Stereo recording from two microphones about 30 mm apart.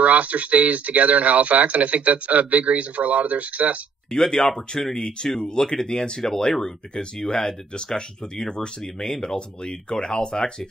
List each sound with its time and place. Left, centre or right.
0.0 s speech: right
4.1 s speech: centre
8.5 s speech: centre
9.2 s speech: left